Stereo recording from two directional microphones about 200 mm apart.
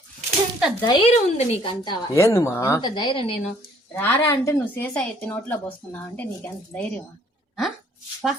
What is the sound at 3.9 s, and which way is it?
A woman's voice, 10° left (ahead or behind).